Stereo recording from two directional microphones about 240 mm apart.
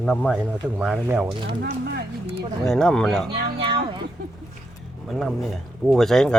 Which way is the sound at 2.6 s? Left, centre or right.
Centre.